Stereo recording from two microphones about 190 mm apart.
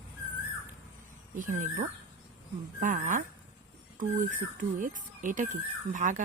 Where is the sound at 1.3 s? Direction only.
40° right (ahead or behind).